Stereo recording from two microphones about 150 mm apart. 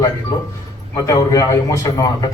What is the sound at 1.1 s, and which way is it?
A man's voice, 20° left (ahead or behind).